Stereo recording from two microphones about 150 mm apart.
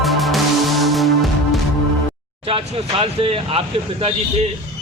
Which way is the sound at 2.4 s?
35° right (ahead or behind).